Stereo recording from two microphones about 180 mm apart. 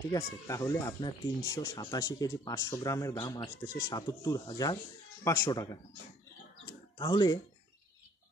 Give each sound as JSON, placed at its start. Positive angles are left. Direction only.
{"t": 0.1, "sound": "speech", "side_deg": 15}
{"t": 7.0, "sound": "speech", "side_deg": 25}